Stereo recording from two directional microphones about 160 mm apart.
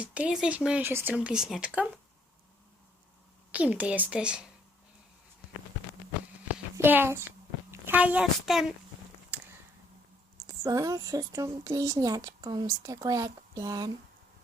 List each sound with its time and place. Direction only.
0.0 s speech: 5° right (ahead or behind)
3.5 s speech: 10° right (ahead or behind)
6.7 s a woman's voice: 15° right (ahead or behind)
10.4 s speech: 20° right (ahead or behind)